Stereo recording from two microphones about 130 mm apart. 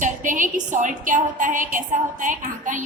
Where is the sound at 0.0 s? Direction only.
85° right.